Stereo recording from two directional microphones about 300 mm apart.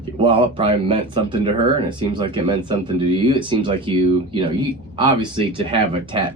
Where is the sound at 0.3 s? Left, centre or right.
Centre.